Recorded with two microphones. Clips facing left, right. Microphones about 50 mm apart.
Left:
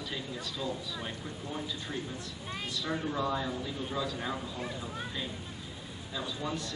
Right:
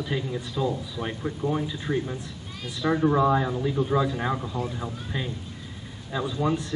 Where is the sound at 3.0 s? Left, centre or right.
Right.